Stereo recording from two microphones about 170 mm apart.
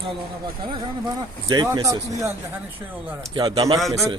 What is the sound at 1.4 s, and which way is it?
Speech, 20° right (ahead or behind).